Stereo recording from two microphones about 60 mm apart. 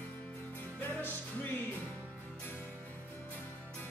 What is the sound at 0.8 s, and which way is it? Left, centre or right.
Music, left.